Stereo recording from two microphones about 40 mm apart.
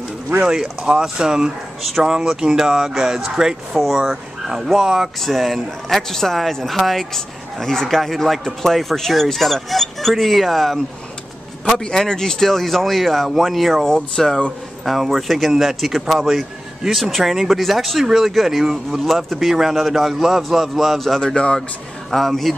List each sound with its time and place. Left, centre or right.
0.5 s speech: centre
2.5 s speech: centre
3.8 s speech: centre
11.8 s speech: centre
13.8 s speech: centre
14.9 s speech: centre
21.2 s speech: left
22.1 s speech: centre